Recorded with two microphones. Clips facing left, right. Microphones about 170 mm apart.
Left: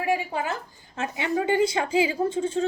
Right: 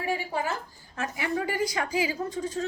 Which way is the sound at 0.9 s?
25° left (ahead or behind).